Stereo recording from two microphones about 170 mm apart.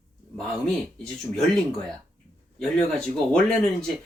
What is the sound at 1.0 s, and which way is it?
Speech, centre (ahead or behind).